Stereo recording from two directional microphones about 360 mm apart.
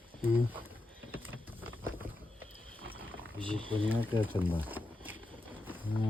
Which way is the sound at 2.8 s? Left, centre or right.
Right.